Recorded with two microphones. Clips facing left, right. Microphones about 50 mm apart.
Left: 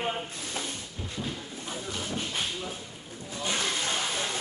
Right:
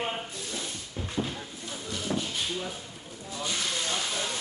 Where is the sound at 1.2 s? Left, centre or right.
Right.